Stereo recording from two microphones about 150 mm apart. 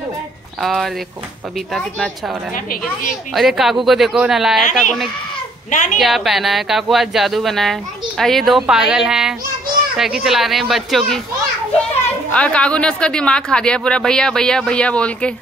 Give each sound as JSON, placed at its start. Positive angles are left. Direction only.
{"t": 0.6, "sound": "speech", "side_deg": 0}
{"t": 3.3, "sound": "speech", "side_deg": 0}
{"t": 5.7, "sound": "a woman's voice", "side_deg": 55}
{"t": 5.9, "sound": "speech", "side_deg": 0}
{"t": 12.3, "sound": "speech", "side_deg": 10}